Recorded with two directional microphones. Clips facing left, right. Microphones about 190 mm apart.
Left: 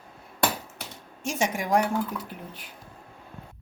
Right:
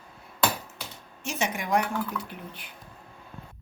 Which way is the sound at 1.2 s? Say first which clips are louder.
Left 3 dB; 45° left (ahead or behind).